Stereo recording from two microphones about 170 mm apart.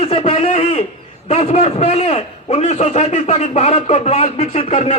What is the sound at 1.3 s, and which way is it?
A man's voice, 40° left (ahead or behind).